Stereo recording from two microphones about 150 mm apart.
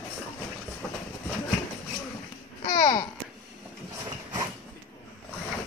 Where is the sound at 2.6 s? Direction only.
60° left (ahead or behind).